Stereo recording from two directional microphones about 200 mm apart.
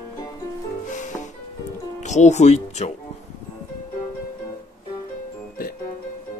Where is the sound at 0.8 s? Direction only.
40° left (ahead or behind).